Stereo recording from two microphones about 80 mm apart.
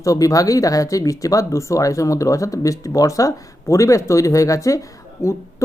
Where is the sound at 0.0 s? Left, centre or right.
Left.